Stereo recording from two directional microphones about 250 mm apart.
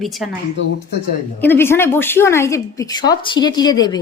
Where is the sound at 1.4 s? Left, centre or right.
Centre.